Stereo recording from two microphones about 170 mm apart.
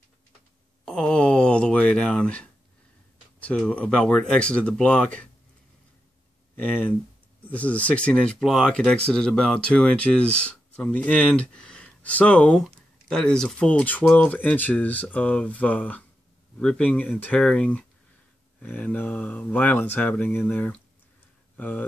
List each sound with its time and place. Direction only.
0.8 s a sound: 5° left (ahead or behind)
3.3 s speech: 5° left (ahead or behind)
6.6 s speech: 10° left (ahead or behind)